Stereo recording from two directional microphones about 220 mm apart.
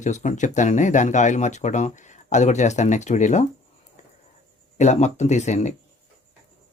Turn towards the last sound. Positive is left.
turn(degrees=30)  # may be behind; listen again after turning